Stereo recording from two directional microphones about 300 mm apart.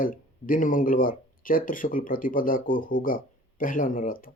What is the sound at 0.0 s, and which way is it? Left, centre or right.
Speech, left.